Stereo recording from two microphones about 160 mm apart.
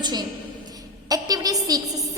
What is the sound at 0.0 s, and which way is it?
Speech, 25° right (ahead or behind).